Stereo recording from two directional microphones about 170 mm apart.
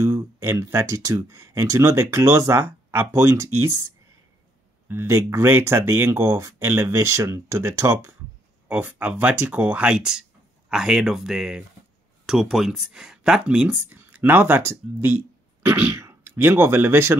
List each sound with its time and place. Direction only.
0.0 s speech: 15° right (ahead or behind)